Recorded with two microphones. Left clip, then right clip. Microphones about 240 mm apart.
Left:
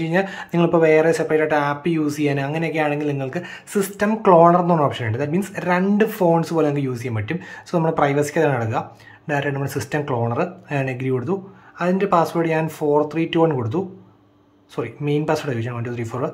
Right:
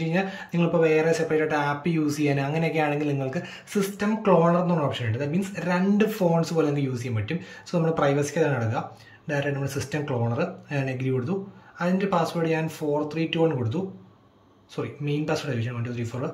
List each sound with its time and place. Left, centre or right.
0.0 s speech: centre
14.8 s speech: centre